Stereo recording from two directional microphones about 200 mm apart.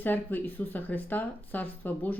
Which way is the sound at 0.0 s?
10° left (ahead or behind).